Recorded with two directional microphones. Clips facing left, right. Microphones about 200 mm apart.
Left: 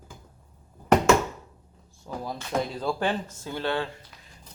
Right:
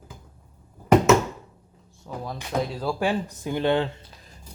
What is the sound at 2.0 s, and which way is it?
Drawer open or close, 5° left (ahead or behind).